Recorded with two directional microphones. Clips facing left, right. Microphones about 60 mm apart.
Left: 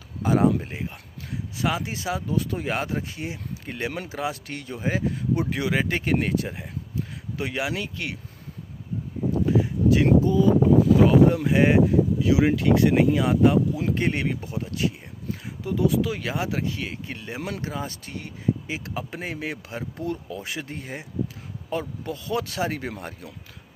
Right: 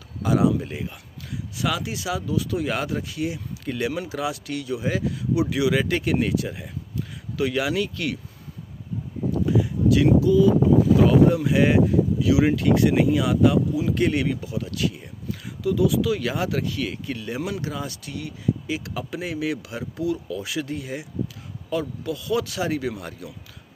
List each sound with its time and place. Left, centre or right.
0.2 s speech: left
6.1 s speech: left
9.5 s a sound: left
10.2 s speech: left